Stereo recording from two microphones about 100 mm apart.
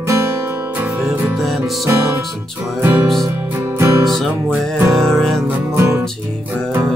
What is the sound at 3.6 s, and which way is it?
Music, 25° right (ahead or behind).